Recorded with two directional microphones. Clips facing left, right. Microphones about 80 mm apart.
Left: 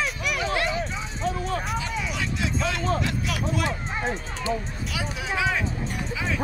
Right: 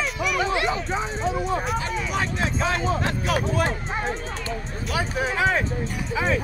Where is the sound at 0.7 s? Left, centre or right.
Right.